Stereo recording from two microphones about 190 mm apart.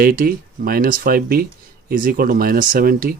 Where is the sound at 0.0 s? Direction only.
50° right (ahead or behind).